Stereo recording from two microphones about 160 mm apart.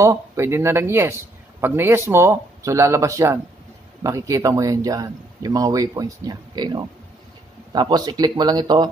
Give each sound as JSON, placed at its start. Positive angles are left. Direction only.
{"t": 0.0, "sound": "speech", "side_deg": -15}